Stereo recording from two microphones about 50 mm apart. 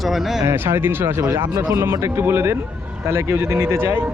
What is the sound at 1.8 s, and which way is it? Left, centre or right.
Speech, right.